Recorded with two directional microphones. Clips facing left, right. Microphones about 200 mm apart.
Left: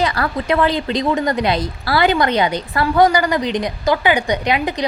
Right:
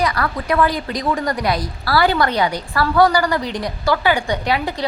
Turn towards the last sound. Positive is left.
turn(degrees=20)  # may be behind; listen again after turning